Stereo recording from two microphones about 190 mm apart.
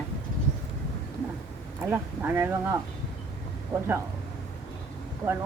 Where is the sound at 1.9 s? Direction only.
10° right (ahead or behind).